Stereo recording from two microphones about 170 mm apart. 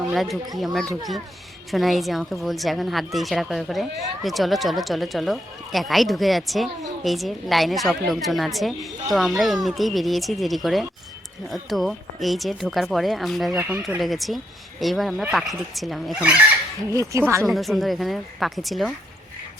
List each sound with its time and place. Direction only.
0.1 s a woman's voice: centre (ahead or behind)
13.6 s speech: 15° right (ahead or behind)
14.0 s a woman's voice: centre (ahead or behind)
16.9 s speech: 20° right (ahead or behind)
17.4 s a woman's voice: centre (ahead or behind)